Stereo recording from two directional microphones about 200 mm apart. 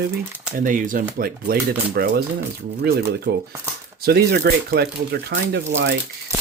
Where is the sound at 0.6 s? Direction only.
40° right (ahead or behind).